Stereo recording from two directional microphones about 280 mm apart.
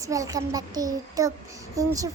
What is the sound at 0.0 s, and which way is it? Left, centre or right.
A child's voice, centre.